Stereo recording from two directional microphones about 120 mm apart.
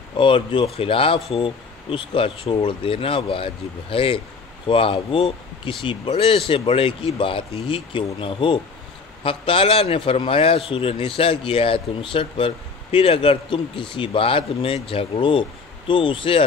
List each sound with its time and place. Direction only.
0.2 s a man's voice: 45° left (ahead or behind)